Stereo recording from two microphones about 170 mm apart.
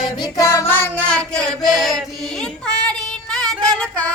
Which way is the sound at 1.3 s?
5° left (ahead or behind).